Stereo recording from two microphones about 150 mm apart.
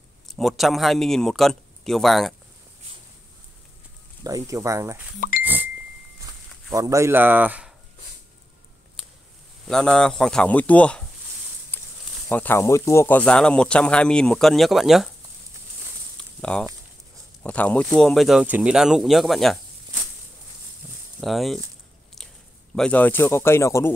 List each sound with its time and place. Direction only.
0.3 s speech: centre (ahead or behind)
4.2 s speech: 25° right (ahead or behind)
5.4 s a sound: 10° right (ahead or behind)
6.2 s speech: 20° right (ahead or behind)
9.7 s speech: 5° left (ahead or behind)
11.7 s a sound: 10° left (ahead or behind)
12.3 s speech: 10° left (ahead or behind)
16.2 s a sound: 5° left (ahead or behind)
17.4 s speech: 10° left (ahead or behind)
21.2 s speech: centre (ahead or behind)
22.8 s speech: 10° left (ahead or behind)